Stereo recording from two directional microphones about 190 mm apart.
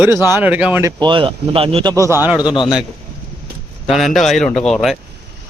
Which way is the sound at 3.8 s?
Centre (ahead or behind).